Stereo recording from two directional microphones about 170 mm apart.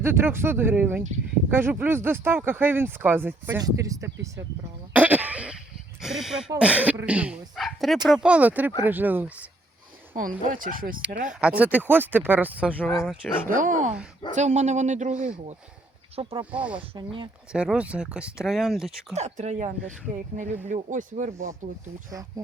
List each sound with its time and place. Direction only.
0.0 s speech: 15° right (ahead or behind)
4.9 s throat clearing: 10° right (ahead or behind)
6.0 s speech: centre (ahead or behind)
10.2 s speech: 55° right (ahead or behind)
11.3 s speech: 5° right (ahead or behind)
12.7 s speech: 10° left (ahead or behind)
13.5 s speech: 50° right (ahead or behind)
16.1 s speech: 30° right (ahead or behind)
16.5 s speech: 10° right (ahead or behind)
16.9 s speech: 30° right (ahead or behind)
17.5 s speech: 5° right (ahead or behind)
19.1 s speech: 40° right (ahead or behind)